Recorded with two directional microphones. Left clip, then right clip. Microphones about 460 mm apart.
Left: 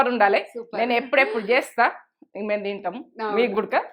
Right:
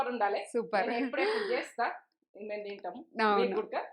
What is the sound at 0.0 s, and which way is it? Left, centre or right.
Speech, left.